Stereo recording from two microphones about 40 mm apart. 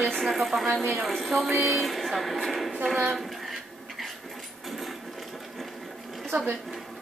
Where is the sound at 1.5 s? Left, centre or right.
Right.